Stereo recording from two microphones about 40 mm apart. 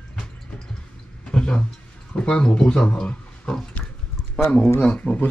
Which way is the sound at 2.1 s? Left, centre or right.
Left.